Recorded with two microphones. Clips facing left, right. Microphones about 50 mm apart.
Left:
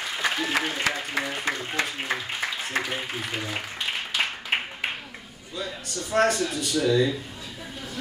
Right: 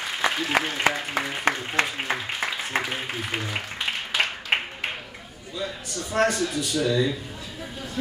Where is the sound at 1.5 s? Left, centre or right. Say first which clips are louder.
Right 9 dB; right.